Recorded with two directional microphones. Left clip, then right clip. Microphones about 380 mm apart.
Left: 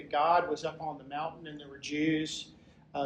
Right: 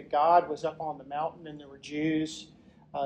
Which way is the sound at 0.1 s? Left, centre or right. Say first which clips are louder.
Right 4 dB; centre.